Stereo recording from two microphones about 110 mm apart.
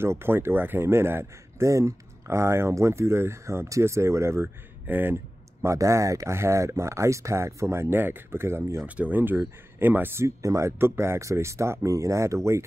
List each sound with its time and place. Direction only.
0.0 s speech: 20° right (ahead or behind)